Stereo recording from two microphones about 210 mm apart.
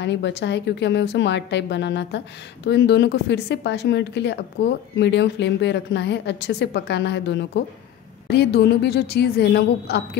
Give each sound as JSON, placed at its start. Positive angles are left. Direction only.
{"t": 0.0, "sound": "a woman's voice", "side_deg": 55}